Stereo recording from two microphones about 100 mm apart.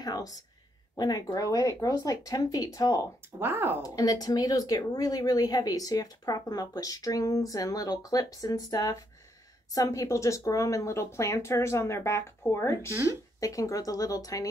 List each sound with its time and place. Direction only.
0.0 s a sound: 40° left (ahead or behind)
0.9 s speech: 40° left (ahead or behind)
3.3 s speech: 20° right (ahead or behind)
3.8 s speech: 40° left (ahead or behind)